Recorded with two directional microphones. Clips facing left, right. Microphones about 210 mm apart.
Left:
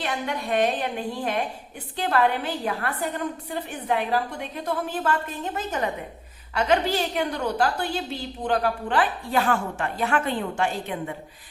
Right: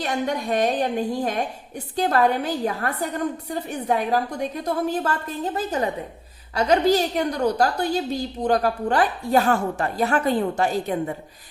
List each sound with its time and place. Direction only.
0.0 s a woman's voice: 40° right (ahead or behind)